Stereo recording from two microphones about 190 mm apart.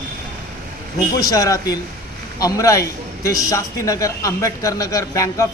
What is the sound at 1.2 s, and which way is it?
A man's voice, 20° left (ahead or behind).